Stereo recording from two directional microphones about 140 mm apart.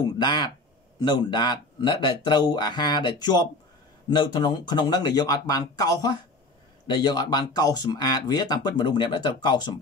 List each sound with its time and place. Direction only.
0.2 s speech: 35° left (ahead or behind)